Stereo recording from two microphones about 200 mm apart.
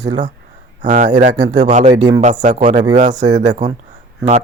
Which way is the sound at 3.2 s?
20° right (ahead or behind).